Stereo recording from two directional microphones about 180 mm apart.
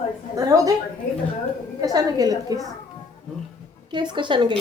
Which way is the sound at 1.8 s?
20° right (ahead or behind).